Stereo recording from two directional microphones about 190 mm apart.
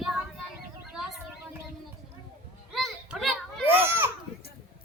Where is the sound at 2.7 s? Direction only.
Centre (ahead or behind).